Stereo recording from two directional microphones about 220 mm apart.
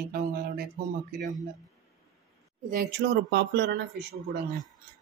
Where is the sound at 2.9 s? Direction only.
50° right (ahead or behind).